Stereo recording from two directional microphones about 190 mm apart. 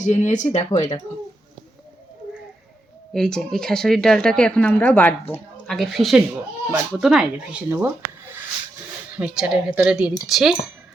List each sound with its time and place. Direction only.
0.0 s speech: 40° left (ahead or behind)
0.8 s speech: 20° left (ahead or behind)
3.1 s speech: 5° left (ahead or behind)
6.7 s speech: 10° right (ahead or behind)
9.1 s speech: 5° right (ahead or behind)